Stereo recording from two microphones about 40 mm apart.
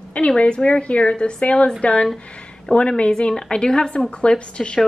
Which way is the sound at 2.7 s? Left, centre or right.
Centre.